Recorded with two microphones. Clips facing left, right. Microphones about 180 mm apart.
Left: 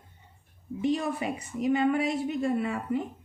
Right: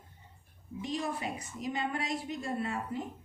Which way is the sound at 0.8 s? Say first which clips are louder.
Left 7 dB; 60° left (ahead or behind).